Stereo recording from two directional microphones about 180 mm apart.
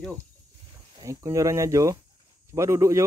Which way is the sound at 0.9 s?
20° right (ahead or behind).